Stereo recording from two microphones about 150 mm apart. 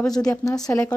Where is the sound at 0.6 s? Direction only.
20° left (ahead or behind).